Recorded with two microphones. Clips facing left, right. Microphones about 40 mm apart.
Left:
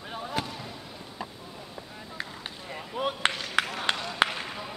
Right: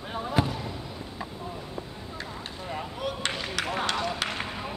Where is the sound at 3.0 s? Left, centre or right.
Left.